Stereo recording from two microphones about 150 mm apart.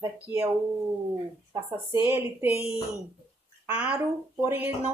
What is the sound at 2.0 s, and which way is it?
Speech, 10° right (ahead or behind).